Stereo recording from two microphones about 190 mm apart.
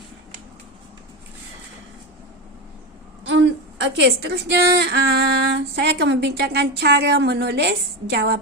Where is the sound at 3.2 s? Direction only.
75° right (ahead or behind).